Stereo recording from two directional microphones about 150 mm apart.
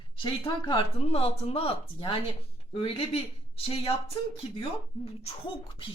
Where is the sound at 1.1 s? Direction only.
40° left (ahead or behind).